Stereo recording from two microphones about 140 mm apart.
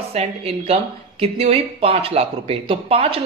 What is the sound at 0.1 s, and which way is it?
Speech, 45° right (ahead or behind).